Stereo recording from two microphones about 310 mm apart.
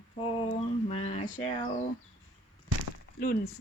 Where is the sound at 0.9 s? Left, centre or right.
Centre.